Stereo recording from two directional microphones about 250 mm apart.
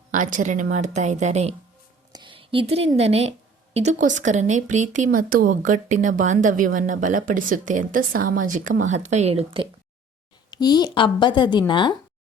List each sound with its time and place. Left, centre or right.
0.1 s a woman's voice: right
10.5 s speech: centre